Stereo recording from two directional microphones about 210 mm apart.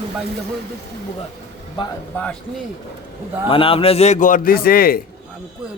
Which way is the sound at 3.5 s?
25° left (ahead or behind).